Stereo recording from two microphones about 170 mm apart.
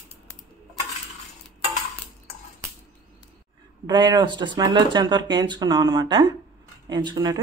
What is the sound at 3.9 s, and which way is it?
Speech, 25° right (ahead or behind).